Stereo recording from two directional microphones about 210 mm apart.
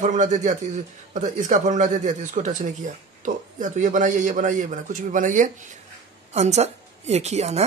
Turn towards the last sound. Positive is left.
turn(degrees=-30)  # may be behind; listen again after turning